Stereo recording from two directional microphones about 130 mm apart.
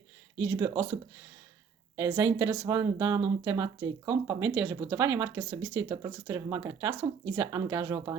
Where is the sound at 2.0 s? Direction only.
25° right (ahead or behind).